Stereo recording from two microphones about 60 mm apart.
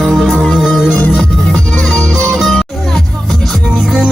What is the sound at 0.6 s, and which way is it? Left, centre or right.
Music, centre.